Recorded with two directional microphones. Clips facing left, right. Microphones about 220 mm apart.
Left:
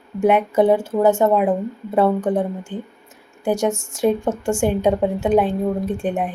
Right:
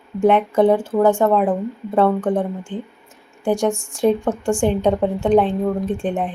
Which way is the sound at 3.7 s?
20° left (ahead or behind).